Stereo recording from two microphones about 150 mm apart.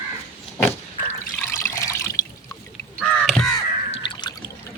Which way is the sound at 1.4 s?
15° left (ahead or behind).